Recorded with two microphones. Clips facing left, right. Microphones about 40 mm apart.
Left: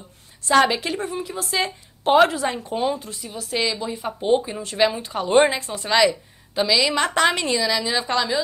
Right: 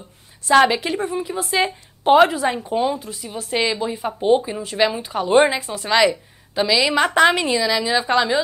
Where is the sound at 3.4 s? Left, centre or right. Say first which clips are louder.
Right 3 dB; right.